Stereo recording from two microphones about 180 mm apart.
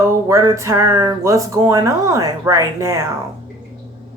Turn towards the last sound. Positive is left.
turn(degrees=-15)  # may be behind; listen again after turning